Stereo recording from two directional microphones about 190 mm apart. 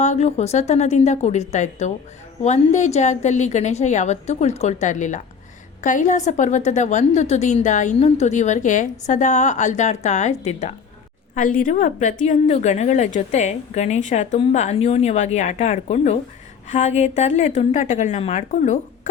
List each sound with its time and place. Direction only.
0.0 s a woman's voice: 35° left (ahead or behind)